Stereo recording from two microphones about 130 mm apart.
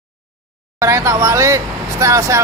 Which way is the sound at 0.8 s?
20° right (ahead or behind).